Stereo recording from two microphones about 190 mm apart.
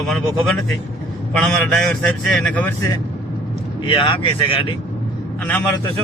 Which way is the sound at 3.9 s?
25° left (ahead or behind).